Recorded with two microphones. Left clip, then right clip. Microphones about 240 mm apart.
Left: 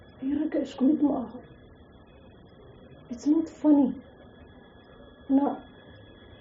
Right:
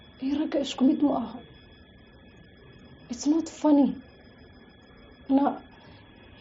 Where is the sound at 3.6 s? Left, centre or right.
Right.